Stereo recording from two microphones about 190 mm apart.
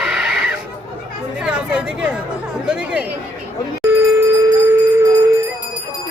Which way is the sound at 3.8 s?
10° right (ahead or behind).